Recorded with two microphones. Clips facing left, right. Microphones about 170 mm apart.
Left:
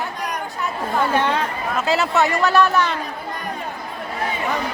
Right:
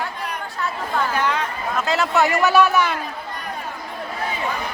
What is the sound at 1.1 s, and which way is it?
Speech, 25° left (ahead or behind).